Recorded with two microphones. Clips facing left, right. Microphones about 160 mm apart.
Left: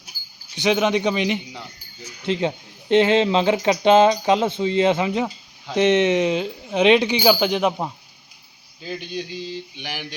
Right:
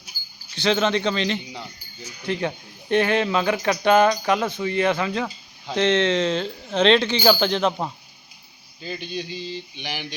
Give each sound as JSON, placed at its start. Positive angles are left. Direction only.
{"t": 0.5, "sound": "speech", "side_deg": 15}